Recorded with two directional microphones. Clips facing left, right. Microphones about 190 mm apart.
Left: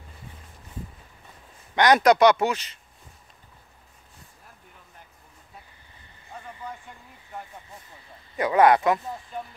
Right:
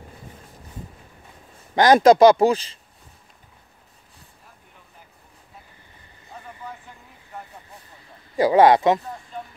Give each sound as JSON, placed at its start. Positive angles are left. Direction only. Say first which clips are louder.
{"t": 1.8, "sound": "speech", "louder": "right 5 dB", "side_deg": -30}
{"t": 8.4, "sound": "speech", "louder": "right 4 dB", "side_deg": -30}
{"t": 9.3, "sound": "vehicle", "louder": "even", "side_deg": 5}